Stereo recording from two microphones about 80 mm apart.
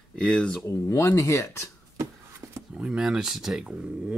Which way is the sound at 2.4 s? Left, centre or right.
Right.